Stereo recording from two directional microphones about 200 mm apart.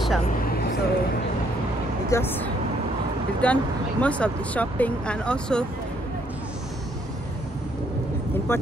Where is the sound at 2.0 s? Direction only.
15° left (ahead or behind).